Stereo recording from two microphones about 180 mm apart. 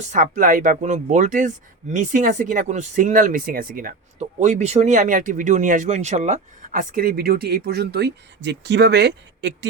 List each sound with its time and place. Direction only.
0.0 s speech: 45° right (ahead or behind); by 9.6 s 75° right (ahead or behind)